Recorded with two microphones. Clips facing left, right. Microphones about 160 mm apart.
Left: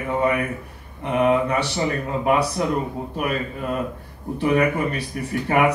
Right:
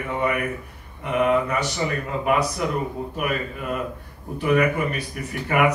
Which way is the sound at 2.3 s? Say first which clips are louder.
Left 2 dB; 30° left (ahead or behind).